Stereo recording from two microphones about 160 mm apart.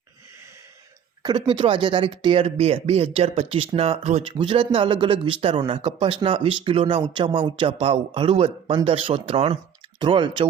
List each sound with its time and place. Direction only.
1.2 s speech: 30° right (ahead or behind)